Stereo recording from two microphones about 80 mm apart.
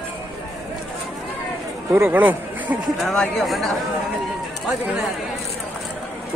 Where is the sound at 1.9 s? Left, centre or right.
Right.